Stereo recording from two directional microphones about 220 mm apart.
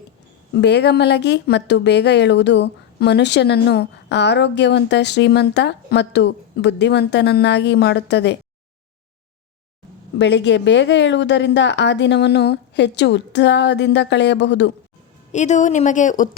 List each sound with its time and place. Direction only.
0.5 s speech: 50° left (ahead or behind)
10.2 s speech: 55° left (ahead or behind)
15.3 s a woman's voice: 30° left (ahead or behind)